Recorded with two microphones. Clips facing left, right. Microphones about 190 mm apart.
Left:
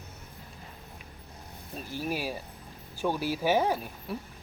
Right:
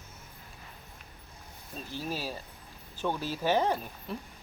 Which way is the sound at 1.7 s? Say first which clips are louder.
Left 3 dB; 10° left (ahead or behind).